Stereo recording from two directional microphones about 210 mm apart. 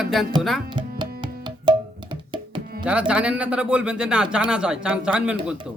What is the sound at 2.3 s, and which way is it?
Tabla, 20° right (ahead or behind).